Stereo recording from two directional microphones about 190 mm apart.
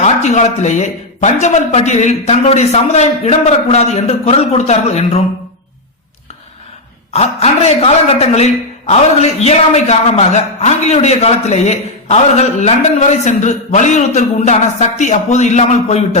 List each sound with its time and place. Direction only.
0.0 s a man's voice: 40° left (ahead or behind)
7.1 s a man's voice: 35° left (ahead or behind)